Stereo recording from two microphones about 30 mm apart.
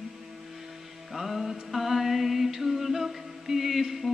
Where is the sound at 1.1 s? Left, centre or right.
Centre.